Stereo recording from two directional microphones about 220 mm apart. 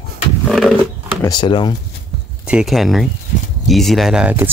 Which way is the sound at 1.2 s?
20° left (ahead or behind).